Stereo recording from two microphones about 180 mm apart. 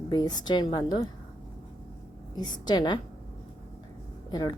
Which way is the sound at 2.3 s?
25° left (ahead or behind).